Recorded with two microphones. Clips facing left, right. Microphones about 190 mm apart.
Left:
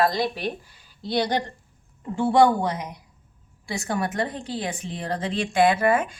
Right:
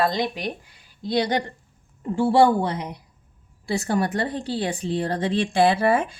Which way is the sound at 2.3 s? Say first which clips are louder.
Even; 30° right (ahead or behind).